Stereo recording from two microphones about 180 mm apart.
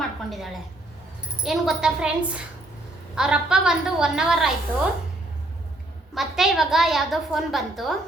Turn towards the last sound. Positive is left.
turn(degrees=0)  # may be behind; listen again after turning